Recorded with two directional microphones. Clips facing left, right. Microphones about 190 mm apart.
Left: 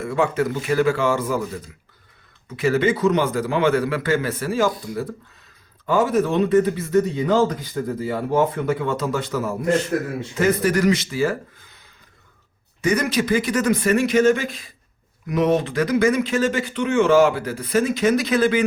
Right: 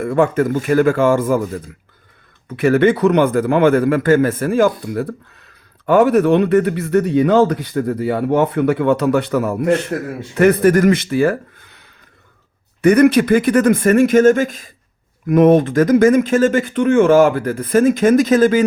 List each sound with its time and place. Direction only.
0.0 s speech: 50° right (ahead or behind)